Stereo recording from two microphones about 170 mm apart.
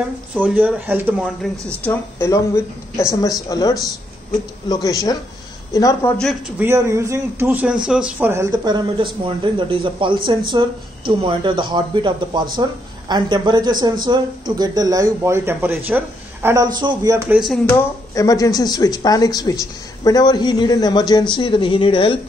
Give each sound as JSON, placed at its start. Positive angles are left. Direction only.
{"t": 0.3, "sound": "a man's voice", "side_deg": -10}
{"t": 1.8, "sound": "a woman's voice", "side_deg": 15}
{"t": 6.6, "sound": "a man's voice", "side_deg": -15}
{"t": 17.6, "sound": "speech", "side_deg": 20}